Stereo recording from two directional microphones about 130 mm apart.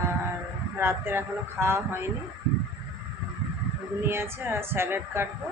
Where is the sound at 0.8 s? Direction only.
20° right (ahead or behind).